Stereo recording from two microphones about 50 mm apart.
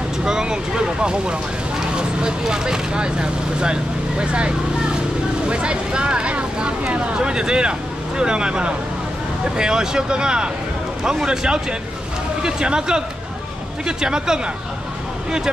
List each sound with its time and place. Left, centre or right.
0.2 s speech: centre